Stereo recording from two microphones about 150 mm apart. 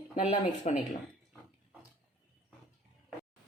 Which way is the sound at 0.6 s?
55° left (ahead or behind).